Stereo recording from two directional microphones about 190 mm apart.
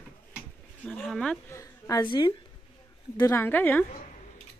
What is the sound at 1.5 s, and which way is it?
Speech, 15° left (ahead or behind).